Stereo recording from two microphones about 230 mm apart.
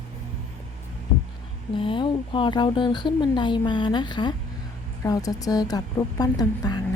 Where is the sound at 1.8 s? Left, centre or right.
Left.